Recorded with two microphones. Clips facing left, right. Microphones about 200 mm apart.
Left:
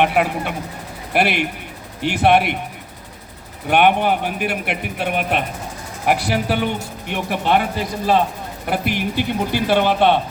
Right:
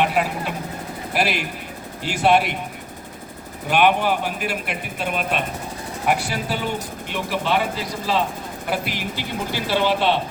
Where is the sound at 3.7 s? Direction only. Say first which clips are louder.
Left 3 dB; 55° left (ahead or behind).